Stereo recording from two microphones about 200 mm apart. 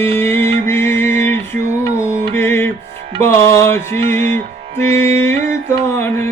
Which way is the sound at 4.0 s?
30° right (ahead or behind).